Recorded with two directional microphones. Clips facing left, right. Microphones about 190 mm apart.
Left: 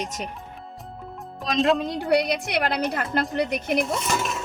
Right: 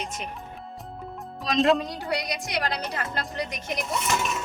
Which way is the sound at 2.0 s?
55° left (ahead or behind).